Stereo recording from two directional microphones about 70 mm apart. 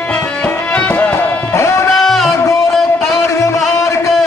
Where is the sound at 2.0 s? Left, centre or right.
Centre.